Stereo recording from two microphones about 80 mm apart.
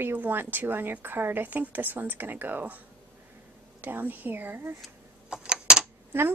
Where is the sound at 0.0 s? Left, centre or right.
Right.